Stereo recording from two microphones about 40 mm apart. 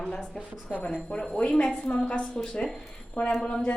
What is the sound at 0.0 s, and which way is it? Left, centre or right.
A woman's voice, left.